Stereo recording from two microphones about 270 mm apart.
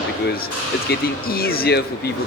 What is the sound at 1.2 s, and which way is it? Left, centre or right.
Speech, left.